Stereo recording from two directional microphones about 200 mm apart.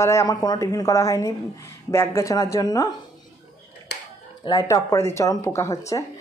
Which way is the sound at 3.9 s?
55° left (ahead or behind).